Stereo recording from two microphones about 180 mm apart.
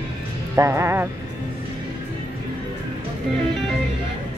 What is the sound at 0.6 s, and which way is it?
Speech, 15° right (ahead or behind).